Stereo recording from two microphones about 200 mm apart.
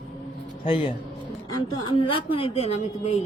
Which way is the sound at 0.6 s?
25° left (ahead or behind).